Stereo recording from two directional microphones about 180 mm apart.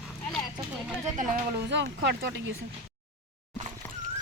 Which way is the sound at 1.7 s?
75° right (ahead or behind).